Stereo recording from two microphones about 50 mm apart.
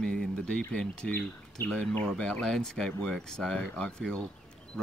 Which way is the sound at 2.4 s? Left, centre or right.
Centre.